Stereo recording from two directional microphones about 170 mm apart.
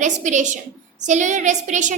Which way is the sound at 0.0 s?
45° right (ahead or behind).